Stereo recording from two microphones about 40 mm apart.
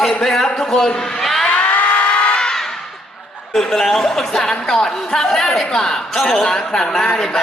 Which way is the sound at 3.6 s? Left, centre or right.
Centre.